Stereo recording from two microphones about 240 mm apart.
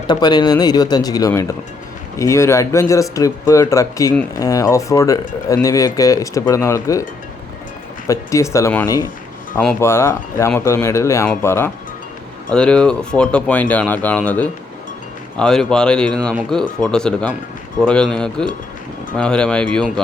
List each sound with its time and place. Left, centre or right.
0.1 s speech: centre
8.0 s speech: centre